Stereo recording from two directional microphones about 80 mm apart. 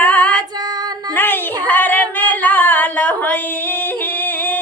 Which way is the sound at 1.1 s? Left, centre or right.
Left.